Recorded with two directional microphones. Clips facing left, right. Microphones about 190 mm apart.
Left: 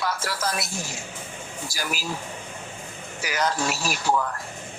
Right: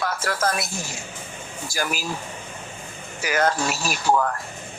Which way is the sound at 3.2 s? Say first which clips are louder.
Right 4 dB; 55° right (ahead or behind).